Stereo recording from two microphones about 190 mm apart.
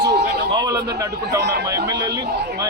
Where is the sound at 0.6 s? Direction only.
20° right (ahead or behind).